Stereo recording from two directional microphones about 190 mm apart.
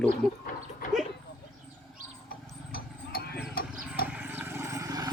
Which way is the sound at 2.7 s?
55° left (ahead or behind).